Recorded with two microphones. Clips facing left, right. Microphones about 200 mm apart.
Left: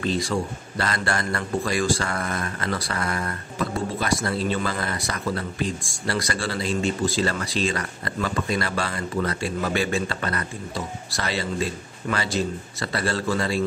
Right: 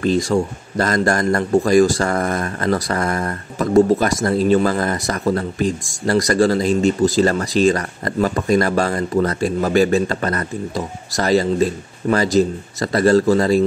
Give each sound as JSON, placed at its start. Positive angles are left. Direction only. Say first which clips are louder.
{"t": 0.0, "sound": "a man's voice", "louder": "right 8 dB", "side_deg": -45}